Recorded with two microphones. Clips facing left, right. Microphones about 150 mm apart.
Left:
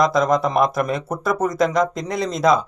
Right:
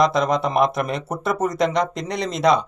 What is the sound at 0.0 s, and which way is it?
Speech, centre (ahead or behind).